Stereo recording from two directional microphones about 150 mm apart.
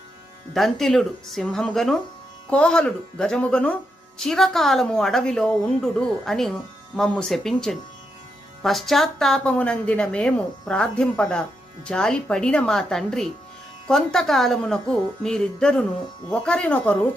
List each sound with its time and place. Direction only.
0.5 s a woman's voice: centre (ahead or behind)